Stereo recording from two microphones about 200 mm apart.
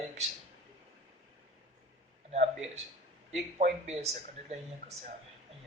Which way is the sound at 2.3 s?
35° right (ahead or behind).